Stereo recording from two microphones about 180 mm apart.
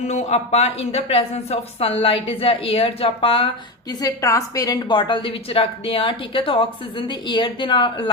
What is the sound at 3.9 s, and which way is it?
A woman's voice, 20° left (ahead or behind).